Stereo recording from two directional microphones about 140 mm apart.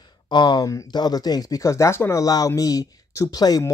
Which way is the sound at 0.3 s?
30° left (ahead or behind).